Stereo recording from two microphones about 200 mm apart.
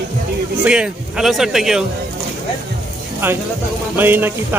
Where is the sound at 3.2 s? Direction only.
10° right (ahead or behind).